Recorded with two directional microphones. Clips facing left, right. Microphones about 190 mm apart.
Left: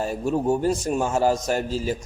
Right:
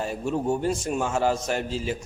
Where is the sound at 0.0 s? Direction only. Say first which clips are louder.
Left 3 dB; 40° left (ahead or behind).